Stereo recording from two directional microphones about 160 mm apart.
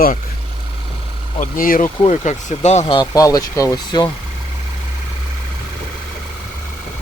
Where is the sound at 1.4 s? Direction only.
60° left (ahead or behind).